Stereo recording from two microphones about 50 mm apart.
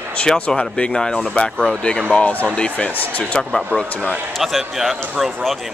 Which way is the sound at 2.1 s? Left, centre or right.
Left.